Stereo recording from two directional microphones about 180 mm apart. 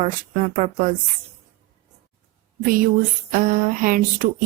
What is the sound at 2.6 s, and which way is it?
Speech, 50° right (ahead or behind).